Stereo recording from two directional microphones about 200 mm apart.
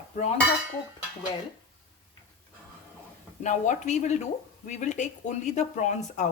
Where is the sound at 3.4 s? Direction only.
40° left (ahead or behind).